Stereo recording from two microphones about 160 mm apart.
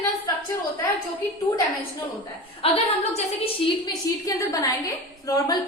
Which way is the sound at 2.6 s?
35° left (ahead or behind).